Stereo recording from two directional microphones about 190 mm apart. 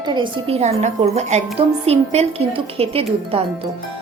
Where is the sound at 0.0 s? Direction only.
25° right (ahead or behind).